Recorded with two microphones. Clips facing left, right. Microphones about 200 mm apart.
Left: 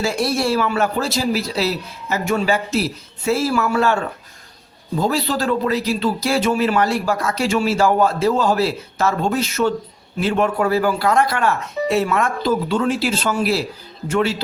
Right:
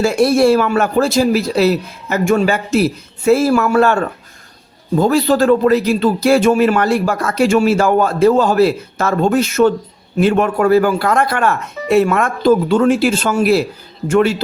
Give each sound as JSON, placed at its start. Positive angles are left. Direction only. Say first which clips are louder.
{"t": 0.0, "sound": "speech", "louder": "right 8 dB", "side_deg": -55}